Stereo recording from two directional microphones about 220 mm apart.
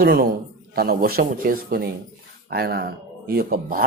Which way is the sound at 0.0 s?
40° right (ahead or behind).